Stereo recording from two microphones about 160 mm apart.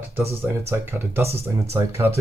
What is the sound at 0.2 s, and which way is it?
Speech, 15° right (ahead or behind).